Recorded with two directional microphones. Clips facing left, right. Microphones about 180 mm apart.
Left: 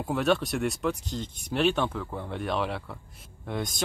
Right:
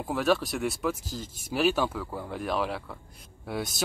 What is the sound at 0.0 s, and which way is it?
Speech, centre (ahead or behind).